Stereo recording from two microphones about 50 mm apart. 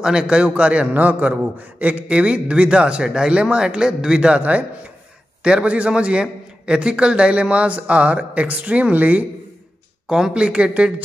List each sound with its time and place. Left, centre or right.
0.0 s a man's voice: centre
4.4 s a man's voice: right
10.0 s a man's voice: centre